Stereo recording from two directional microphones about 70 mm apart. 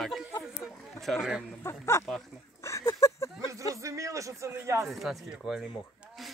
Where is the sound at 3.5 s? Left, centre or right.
Right.